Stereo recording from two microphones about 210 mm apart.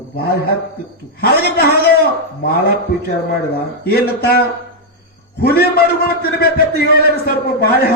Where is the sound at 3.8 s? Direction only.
50° left (ahead or behind).